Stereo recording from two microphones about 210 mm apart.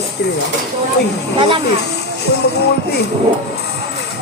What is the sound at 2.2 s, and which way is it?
Speech, 50° left (ahead or behind).